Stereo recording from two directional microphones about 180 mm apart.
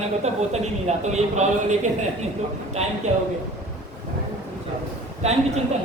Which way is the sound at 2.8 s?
35° right (ahead or behind).